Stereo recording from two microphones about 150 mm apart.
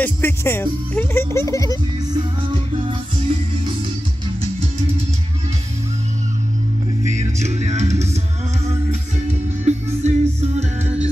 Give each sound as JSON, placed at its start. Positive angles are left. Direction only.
{"t": 0.0, "sound": "speech", "side_deg": 15}
{"t": 2.7, "sound": "music", "side_deg": -35}
{"t": 7.1, "sound": "music", "side_deg": -50}
{"t": 9.3, "sound": "music", "side_deg": -50}